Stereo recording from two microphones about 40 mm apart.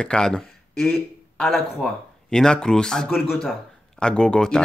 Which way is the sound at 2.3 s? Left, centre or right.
Left.